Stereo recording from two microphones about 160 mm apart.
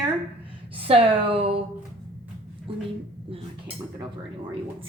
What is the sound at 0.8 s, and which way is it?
Speech, 35° right (ahead or behind).